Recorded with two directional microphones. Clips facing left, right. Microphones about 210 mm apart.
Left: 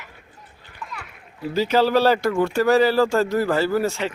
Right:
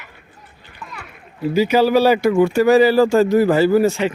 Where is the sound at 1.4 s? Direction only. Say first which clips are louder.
Right 4 dB; 10° right (ahead or behind).